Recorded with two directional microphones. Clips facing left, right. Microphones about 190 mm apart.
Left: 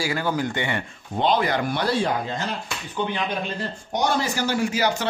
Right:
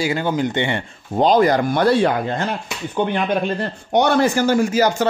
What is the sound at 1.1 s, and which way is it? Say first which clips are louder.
A man's voice: right 7 dB; 40° right (ahead or behind).